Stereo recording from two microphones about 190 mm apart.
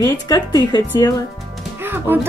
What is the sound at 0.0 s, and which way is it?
Speech, 20° left (ahead or behind).